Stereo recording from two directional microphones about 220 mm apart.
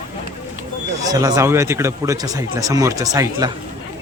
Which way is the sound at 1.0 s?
15° right (ahead or behind).